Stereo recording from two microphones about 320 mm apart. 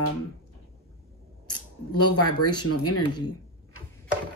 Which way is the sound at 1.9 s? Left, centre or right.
Left.